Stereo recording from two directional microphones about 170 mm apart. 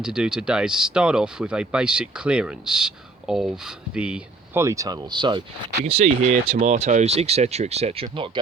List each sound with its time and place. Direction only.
0.0 s speech: 5° right (ahead or behind)
4.6 s speech: 20° right (ahead or behind)
5.8 s speech: 40° right (ahead or behind)